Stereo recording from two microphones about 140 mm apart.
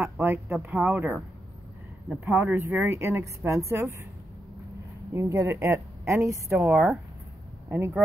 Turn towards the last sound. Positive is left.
turn(degrees=-15)  # may be behind; listen again after turning